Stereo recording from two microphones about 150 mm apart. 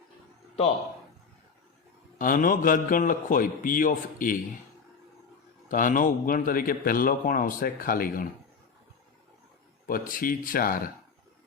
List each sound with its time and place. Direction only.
2.1 s a man's voice: 65° left (ahead or behind)
5.6 s a man's voice: 65° left (ahead or behind)
9.8 s a man's voice: 70° left (ahead or behind)